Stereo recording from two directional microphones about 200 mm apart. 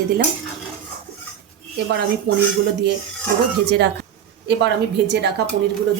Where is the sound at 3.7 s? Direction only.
60° right (ahead or behind).